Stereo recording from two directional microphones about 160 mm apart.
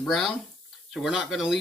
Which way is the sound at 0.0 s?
Centre (ahead or behind).